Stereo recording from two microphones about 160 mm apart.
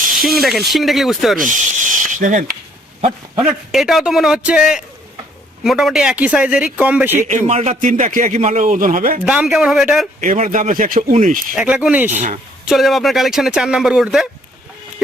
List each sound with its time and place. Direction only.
0.7 s speech: centre (ahead or behind)
1.5 s speech: 55° right (ahead or behind)
3.4 s speech: centre (ahead or behind)
7.3 s a man's voice: 45° right (ahead or behind)
9.2 s speech: 5° right (ahead or behind)
10.2 s a man's voice: 50° right (ahead or behind)
11.5 s speech: 5° right (ahead or behind)
12.1 s a man's voice: 50° right (ahead or behind)
12.6 s speech: centre (ahead or behind)